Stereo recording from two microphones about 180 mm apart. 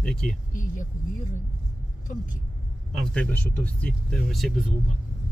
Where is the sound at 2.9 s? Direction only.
5° left (ahead or behind).